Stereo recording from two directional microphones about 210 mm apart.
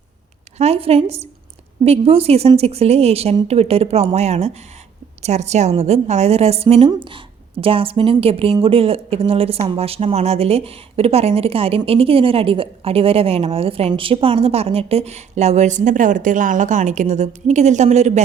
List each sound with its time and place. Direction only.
0.6 s a woman's voice: 30° right (ahead or behind)